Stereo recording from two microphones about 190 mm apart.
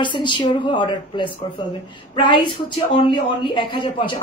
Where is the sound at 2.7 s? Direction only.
25° left (ahead or behind).